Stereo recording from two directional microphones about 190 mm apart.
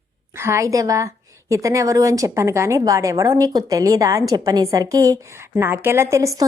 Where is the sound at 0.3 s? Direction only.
15° right (ahead or behind).